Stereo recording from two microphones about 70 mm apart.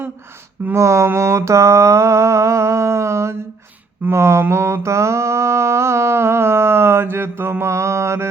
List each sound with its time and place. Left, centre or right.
0.7 s mantra: right